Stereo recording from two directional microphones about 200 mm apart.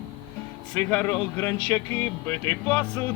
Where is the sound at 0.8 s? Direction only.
10° left (ahead or behind).